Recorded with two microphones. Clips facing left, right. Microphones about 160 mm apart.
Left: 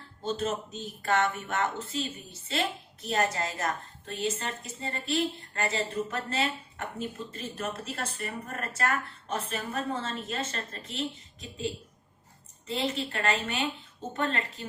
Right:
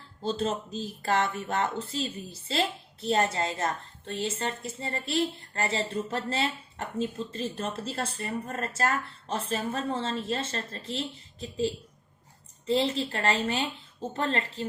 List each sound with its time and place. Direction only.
0.3 s a woman's voice: 30° right (ahead or behind)